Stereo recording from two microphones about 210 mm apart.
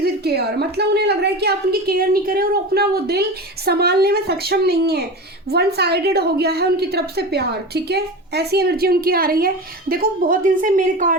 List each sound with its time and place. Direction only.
0.0 s a woman's voice: 50° right (ahead or behind)